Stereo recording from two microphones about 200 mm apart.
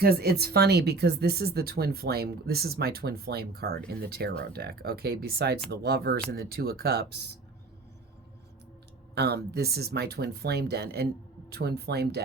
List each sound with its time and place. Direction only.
0.0 s speech: 50° right (ahead or behind)
9.1 s speech: 55° right (ahead or behind)